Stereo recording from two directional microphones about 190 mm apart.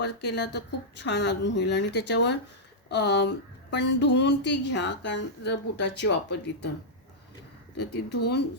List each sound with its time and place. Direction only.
0.0 s a woman's voice: 65° left (ahead or behind)
7.8 s speech: 60° left (ahead or behind)